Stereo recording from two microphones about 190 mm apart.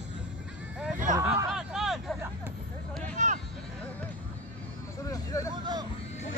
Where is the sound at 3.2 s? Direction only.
40° right (ahead or behind).